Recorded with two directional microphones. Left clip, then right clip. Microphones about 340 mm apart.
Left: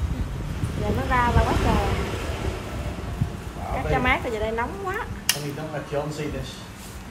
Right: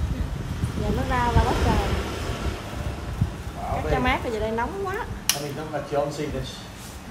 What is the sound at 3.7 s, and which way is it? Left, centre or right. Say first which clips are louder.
Speech: left 1 dB; centre.